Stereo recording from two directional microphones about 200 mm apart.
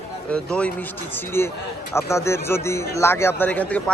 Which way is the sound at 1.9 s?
15° left (ahead or behind).